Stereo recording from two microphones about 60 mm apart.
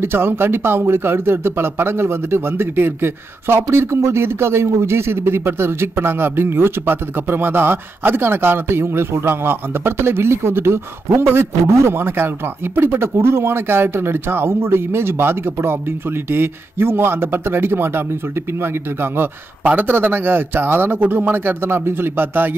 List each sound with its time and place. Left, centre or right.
0.0 s speech: right
19.6 s speech: right